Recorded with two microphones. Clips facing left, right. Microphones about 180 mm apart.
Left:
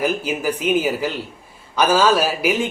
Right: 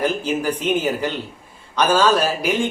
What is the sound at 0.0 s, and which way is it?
Speech, 10° left (ahead or behind).